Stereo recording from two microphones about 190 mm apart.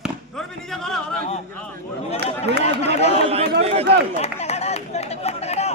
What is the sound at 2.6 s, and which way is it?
Chatter, 35° left (ahead or behind).